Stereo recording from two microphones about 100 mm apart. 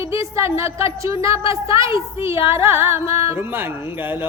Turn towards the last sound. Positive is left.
turn(degrees=-20)  # may be behind; listen again after turning